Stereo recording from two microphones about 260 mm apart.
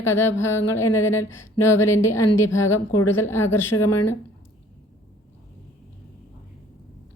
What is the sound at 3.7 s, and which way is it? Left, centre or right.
Speech, left.